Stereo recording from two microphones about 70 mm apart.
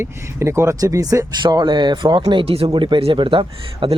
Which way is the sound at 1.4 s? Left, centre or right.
Right.